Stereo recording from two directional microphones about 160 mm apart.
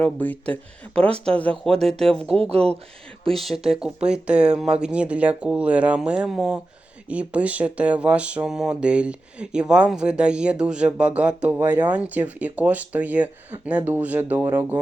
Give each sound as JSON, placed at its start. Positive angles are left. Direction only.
{"t": 0.0, "sound": "speech", "side_deg": 10}
{"t": 2.4, "sound": "speech", "side_deg": -40}
{"t": 3.2, "sound": "speech", "side_deg": 0}